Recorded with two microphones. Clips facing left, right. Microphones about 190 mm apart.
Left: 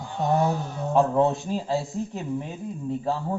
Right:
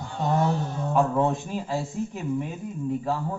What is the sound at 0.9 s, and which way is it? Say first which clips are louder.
Speech: left 2 dB; 30° left (ahead or behind).